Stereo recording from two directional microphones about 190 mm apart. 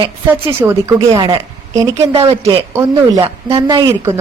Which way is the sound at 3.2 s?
25° right (ahead or behind).